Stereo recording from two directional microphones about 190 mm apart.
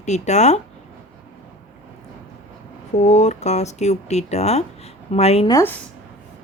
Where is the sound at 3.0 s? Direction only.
35° left (ahead or behind).